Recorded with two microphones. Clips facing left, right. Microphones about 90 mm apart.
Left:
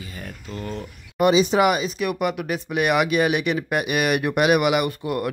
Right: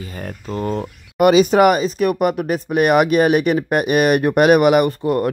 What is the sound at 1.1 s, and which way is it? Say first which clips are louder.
Speech: right 5 dB; 60° right (ahead or behind).